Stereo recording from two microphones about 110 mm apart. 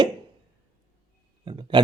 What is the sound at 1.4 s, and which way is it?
Speech, 50° right (ahead or behind).